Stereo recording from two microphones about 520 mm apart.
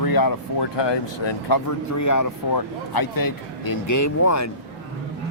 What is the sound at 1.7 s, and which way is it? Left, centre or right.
Speech, left.